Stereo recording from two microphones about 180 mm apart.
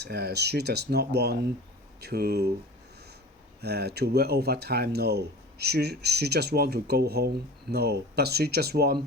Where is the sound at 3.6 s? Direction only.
65° right (ahead or behind).